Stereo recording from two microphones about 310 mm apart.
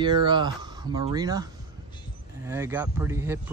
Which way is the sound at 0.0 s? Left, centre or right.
Centre.